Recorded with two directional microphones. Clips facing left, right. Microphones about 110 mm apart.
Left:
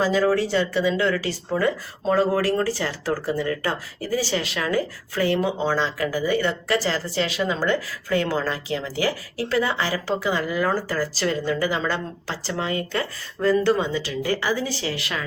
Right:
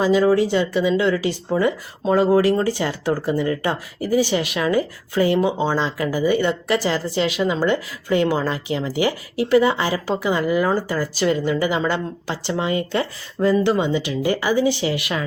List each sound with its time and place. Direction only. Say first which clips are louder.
0.0 s speech: right 4 dB; 15° right (ahead or behind)